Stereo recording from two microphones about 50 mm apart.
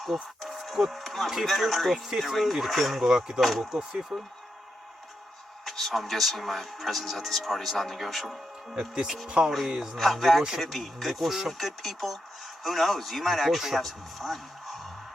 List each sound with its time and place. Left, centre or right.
0.0 s music: centre
0.5 s speech: centre
3.4 s speech: centre
3.8 s speech: centre
5.6 s speech: centre
8.7 s speech: centre
9.9 s speech: centre